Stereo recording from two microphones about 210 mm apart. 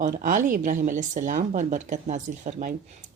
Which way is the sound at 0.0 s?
40° right (ahead or behind).